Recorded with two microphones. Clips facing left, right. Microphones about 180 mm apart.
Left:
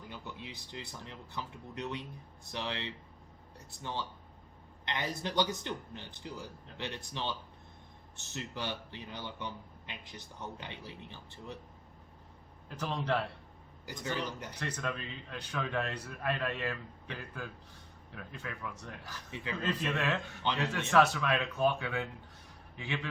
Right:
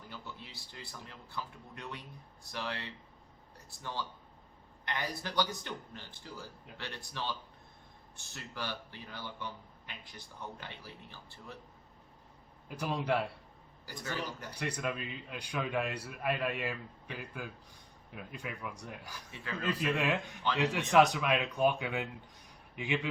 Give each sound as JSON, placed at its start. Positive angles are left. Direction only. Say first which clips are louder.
{"t": 0.1, "sound": "speech", "louder": "left 2 dB", "side_deg": 15}
{"t": 4.9, "sound": "speech", "louder": "left 2 dB", "side_deg": 20}
{"t": 12.6, "sound": "a man's voice", "louder": "right 1 dB", "side_deg": -10}
{"t": 13.8, "sound": "speech", "louder": "left 2 dB", "side_deg": 20}
{"t": 14.5, "sound": "a man's voice", "louder": "right 5 dB", "side_deg": -10}